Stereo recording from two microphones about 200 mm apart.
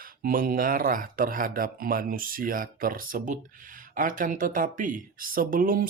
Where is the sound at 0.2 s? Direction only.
45° right (ahead or behind).